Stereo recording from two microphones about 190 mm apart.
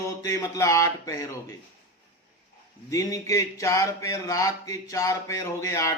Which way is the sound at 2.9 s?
15° left (ahead or behind).